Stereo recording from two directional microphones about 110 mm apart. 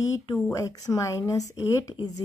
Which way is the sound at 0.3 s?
30° left (ahead or behind).